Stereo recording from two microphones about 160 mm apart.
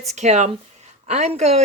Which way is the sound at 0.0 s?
45° right (ahead or behind).